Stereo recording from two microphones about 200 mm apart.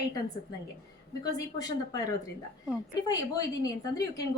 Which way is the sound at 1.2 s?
20° left (ahead or behind).